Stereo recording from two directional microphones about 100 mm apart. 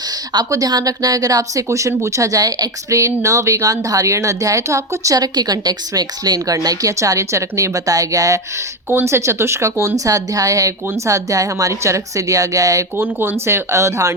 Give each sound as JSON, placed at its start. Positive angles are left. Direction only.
{"t": 0.3, "sound": "speech", "side_deg": -40}
{"t": 8.9, "sound": "speech", "side_deg": -25}
{"t": 13.0, "sound": "speech", "side_deg": -20}